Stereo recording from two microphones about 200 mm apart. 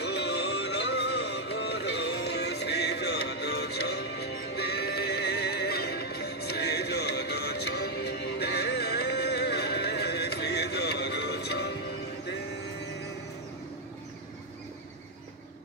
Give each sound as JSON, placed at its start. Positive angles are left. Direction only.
{"t": 0.0, "sound": "music", "side_deg": 55}